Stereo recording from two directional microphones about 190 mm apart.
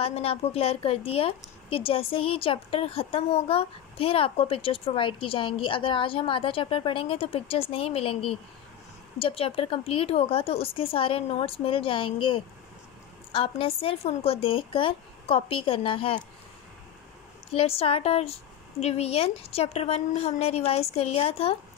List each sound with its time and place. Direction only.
0.0 s a woman's voice: 30° left (ahead or behind)
17.5 s speech: 30° left (ahead or behind)